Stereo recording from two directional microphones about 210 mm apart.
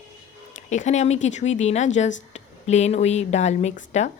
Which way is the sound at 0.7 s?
35° left (ahead or behind).